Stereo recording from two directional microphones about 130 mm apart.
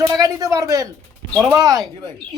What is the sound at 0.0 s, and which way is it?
Speech, 25° right (ahead or behind).